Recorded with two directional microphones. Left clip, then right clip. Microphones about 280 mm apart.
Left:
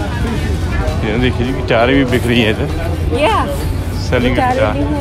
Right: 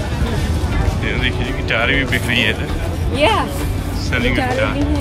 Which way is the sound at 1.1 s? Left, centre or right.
Centre.